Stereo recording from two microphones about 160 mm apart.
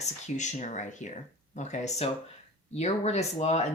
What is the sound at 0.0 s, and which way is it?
Speech, 45° left (ahead or behind).